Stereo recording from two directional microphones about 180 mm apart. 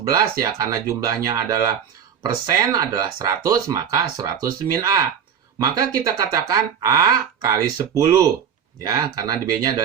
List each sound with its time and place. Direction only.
0.0 s speech: 20° right (ahead or behind)